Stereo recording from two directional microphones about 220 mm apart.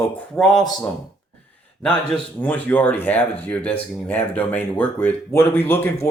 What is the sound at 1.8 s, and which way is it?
Speech, 5° left (ahead or behind).